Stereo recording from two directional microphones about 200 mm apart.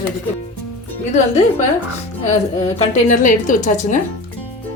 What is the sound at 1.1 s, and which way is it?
A woman's voice, 35° left (ahead or behind).